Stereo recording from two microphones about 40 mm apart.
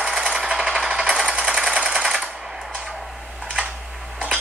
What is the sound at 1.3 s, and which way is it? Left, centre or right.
Sewing machine, right.